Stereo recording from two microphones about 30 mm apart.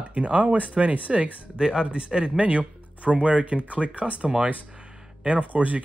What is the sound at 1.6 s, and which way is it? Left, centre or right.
Speech, right.